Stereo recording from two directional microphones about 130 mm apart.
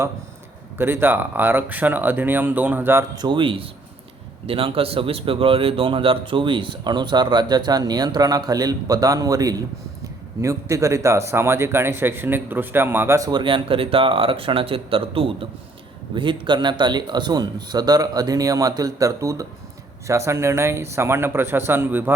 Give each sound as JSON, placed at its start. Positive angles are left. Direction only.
{"t": 0.8, "sound": "speech", "side_deg": -15}
{"t": 3.2, "sound": "speech", "side_deg": -35}
{"t": 13.4, "sound": "speech", "side_deg": -40}